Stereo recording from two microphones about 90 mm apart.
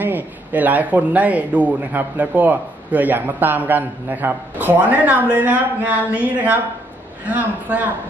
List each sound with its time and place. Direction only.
0.0 s a man's voice: 20° right (ahead or behind)